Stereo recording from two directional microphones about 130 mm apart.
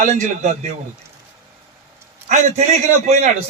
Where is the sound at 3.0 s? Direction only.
65° right (ahead or behind).